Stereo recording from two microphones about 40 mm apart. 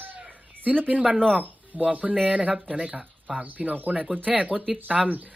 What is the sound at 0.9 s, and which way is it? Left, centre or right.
Speech, right.